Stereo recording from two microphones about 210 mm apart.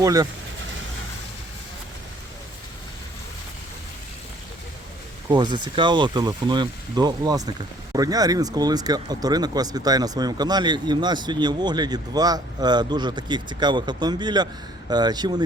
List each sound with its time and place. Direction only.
0.0 s speech: 15° right (ahead or behind)
5.3 s speech: 20° right (ahead or behind)